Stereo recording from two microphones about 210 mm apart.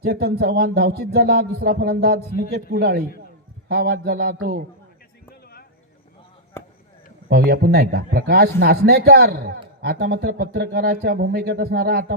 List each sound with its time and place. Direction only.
0.0 s a man's voice: 50° right (ahead or behind)
7.3 s a man's voice: 45° right (ahead or behind)